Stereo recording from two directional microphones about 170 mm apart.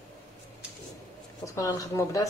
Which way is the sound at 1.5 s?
20° left (ahead or behind).